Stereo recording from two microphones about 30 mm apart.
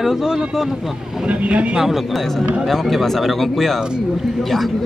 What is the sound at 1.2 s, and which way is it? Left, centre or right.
Speech, right.